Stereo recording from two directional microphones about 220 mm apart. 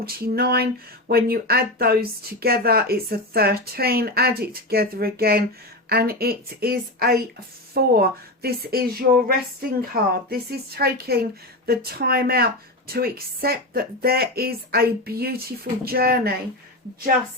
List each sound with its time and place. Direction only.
0.0 s speech: 45° right (ahead or behind)